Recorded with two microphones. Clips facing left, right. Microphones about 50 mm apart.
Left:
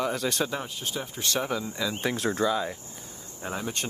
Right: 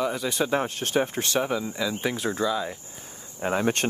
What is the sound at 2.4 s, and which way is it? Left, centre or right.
Speech, centre.